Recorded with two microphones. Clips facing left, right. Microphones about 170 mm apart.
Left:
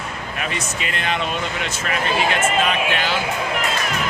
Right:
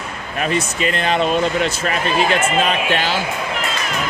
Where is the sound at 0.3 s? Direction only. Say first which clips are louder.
Right 8 dB; 35° right (ahead or behind).